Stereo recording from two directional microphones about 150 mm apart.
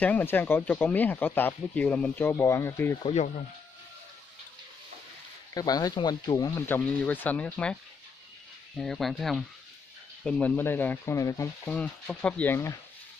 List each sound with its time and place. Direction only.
0.0 s speech: 10° left (ahead or behind)
3.0 s speech: 45° left (ahead or behind)
5.5 s speech: 25° left (ahead or behind); by 7.7 s 10° left (ahead or behind)
8.7 s speech: centre (ahead or behind)